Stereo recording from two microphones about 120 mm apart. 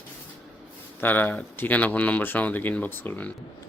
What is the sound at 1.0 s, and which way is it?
Speech, 15° left (ahead or behind).